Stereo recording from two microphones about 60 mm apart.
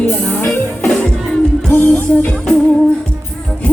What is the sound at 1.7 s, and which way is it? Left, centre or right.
Music, left.